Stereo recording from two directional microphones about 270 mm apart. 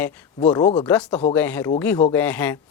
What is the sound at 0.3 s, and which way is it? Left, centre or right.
Speech, centre.